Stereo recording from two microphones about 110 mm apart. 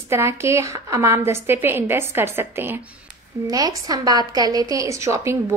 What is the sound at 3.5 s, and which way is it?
A woman's voice, 35° right (ahead or behind).